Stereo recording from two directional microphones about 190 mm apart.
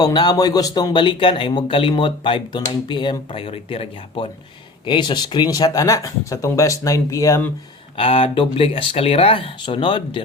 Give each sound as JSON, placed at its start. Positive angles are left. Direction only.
{"t": 0.0, "sound": "speech", "side_deg": 20}
{"t": 7.9, "sound": "speech", "side_deg": 30}